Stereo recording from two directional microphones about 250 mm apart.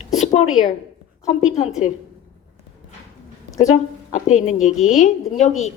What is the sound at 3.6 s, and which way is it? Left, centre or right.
Speech, left.